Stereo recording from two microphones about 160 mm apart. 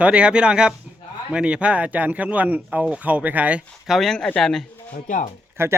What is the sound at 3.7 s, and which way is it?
Speech, centre (ahead or behind).